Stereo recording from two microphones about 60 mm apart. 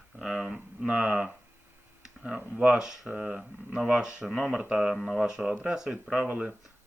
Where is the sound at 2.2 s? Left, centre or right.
Centre.